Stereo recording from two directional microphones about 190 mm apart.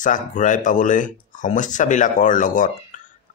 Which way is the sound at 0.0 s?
40° left (ahead or behind).